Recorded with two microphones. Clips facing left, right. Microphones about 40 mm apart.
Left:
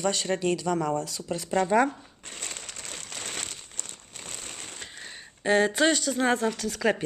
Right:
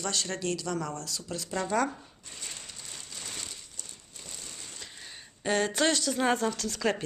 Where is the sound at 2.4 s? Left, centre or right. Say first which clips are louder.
Left 4 dB; left.